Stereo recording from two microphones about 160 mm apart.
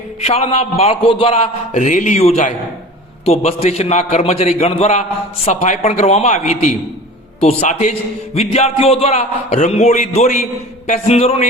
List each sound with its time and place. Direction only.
0.2 s a man's voice: 40° left (ahead or behind)